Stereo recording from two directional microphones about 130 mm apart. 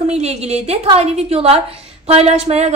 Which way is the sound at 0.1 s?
55° right (ahead or behind).